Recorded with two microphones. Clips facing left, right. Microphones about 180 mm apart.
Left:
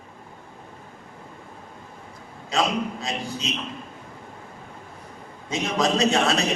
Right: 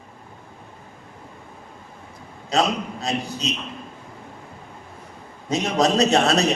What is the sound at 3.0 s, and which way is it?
Speech, 35° right (ahead or behind).